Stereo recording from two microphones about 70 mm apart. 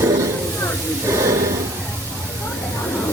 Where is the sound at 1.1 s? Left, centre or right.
Right.